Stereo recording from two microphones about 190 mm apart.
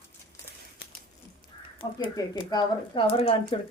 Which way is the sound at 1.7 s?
25° left (ahead or behind).